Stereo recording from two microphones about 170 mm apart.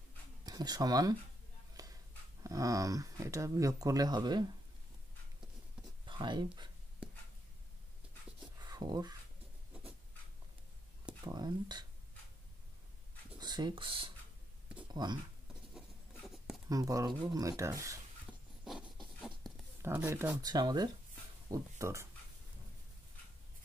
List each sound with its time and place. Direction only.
0.5 s speech: 25° right (ahead or behind)
1.8 s dog: 20° right (ahead or behind)
2.4 s speech: 20° right (ahead or behind)
6.0 s speech: 25° right (ahead or behind)
8.5 s whispering: 25° right (ahead or behind)
11.2 s speech: 25° right (ahead or behind)
13.4 s speech: 25° right (ahead or behind)
15.7 s writing: 5° right (ahead or behind)
16.6 s speech: 20° right (ahead or behind)
18.6 s a sound: centre (ahead or behind)
19.8 s speech: 10° right (ahead or behind)